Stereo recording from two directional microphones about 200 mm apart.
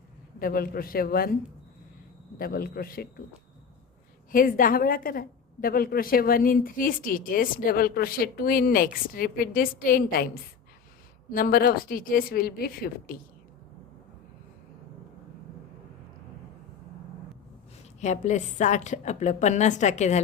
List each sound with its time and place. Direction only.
0.3 s a woman's voice: 45° left (ahead or behind)
2.4 s a woman's voice: 50° left (ahead or behind)
4.3 s a woman's voice: 45° left (ahead or behind)
18.0 s a woman's voice: 35° left (ahead or behind)